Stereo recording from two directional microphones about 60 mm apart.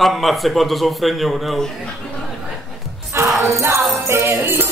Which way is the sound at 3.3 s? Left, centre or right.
Centre.